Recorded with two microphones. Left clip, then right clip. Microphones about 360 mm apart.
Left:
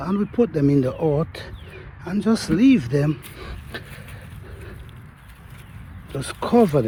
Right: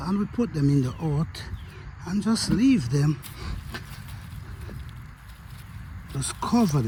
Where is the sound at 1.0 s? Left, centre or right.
Left.